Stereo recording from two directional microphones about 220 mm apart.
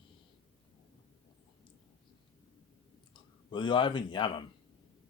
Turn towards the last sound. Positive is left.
turn(degrees=20)  # may be behind; listen again after turning